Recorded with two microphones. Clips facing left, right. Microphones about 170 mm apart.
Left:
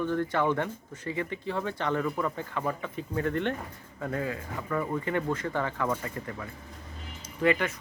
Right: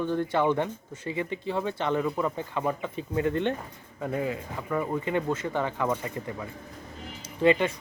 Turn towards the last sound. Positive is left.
turn(degrees=-25)  # may be behind; listen again after turning